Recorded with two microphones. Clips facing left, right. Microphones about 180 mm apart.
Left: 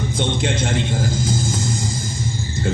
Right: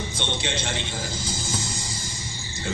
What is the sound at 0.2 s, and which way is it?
Speech, 50° left (ahead or behind).